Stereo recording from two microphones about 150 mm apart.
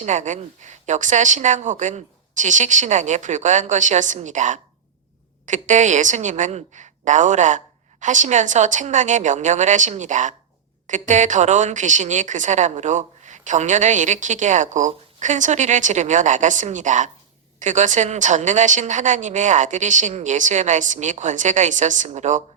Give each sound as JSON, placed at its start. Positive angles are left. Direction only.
{"t": 0.0, "sound": "a woman's voice", "side_deg": -55}